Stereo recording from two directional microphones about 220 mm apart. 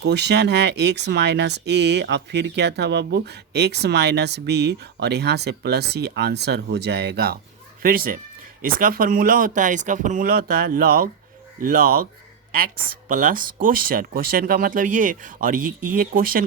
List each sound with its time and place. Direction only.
0.0 s speech: 50° right (ahead or behind)
13.1 s speech: 40° right (ahead or behind)